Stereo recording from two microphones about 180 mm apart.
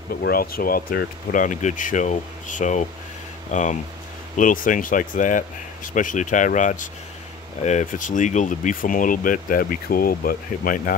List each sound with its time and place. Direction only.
0.1 s speech: 55° left (ahead or behind)